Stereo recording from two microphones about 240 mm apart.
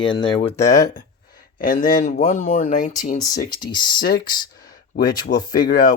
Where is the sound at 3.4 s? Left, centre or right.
Centre.